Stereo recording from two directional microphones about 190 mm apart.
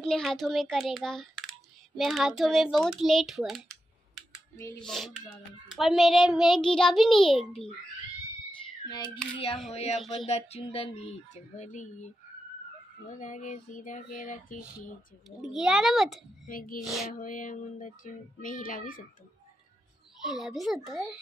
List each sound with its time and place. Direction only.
0.0 s speech: 5° left (ahead or behind)
8.8 s child singing: 20° left (ahead or behind)
9.7 s speech: 35° left (ahead or behind)
13.1 s child singing: 40° left (ahead or behind)
15.2 s speech: centre (ahead or behind)
16.4 s child singing: 45° left (ahead or behind)
20.2 s speech: centre (ahead or behind)